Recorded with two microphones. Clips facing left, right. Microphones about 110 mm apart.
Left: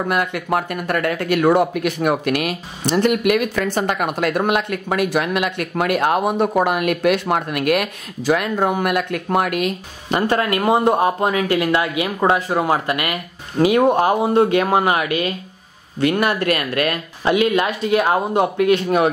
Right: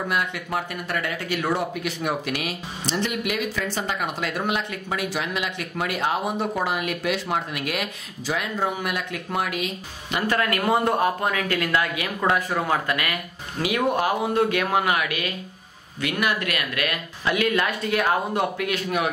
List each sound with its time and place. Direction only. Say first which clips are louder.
0.1 s speech: left 8 dB; 55° left (ahead or behind)
10.2 s speech: left 4 dB; 25° left (ahead or behind)